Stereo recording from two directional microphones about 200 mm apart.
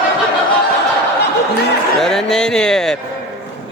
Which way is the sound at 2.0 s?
Centre (ahead or behind).